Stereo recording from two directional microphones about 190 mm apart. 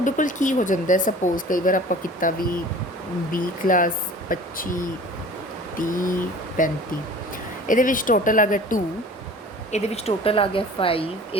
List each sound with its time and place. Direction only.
0.0 s speech: 45° left (ahead or behind)